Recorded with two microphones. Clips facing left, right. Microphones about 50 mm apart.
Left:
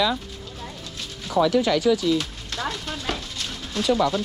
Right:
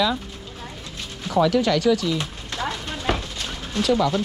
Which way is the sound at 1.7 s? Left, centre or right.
Centre.